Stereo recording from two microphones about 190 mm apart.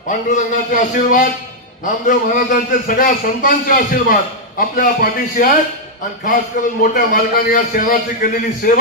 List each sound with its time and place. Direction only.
0.1 s a man's voice: 40° left (ahead or behind)
6.9 s a man's voice: 45° left (ahead or behind)